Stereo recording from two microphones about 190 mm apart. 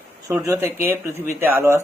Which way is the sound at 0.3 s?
15° right (ahead or behind).